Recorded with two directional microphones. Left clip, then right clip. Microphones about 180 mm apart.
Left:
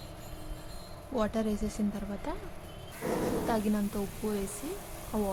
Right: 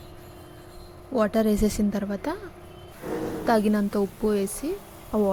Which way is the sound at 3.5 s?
25° right (ahead or behind).